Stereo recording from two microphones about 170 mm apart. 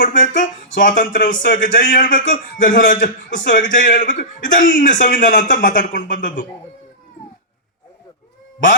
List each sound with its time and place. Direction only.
0.0 s a man's voice: 50° left (ahead or behind)